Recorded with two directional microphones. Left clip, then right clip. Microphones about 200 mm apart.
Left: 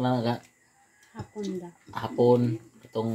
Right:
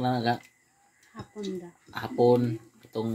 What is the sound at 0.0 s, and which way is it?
Speech, 25° right (ahead or behind).